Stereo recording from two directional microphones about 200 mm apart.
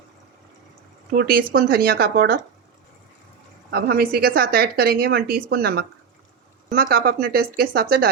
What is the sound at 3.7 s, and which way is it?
Speech, 50° right (ahead or behind).